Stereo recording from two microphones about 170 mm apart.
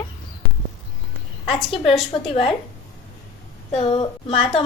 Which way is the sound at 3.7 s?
30° left (ahead or behind).